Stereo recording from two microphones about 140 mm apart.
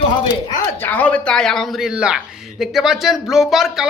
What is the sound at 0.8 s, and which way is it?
Speech, 10° left (ahead or behind).